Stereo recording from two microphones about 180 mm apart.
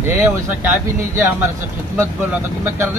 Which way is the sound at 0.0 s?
10° right (ahead or behind).